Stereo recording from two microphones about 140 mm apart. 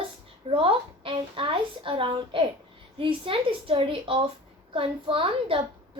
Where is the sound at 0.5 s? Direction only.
40° right (ahead or behind).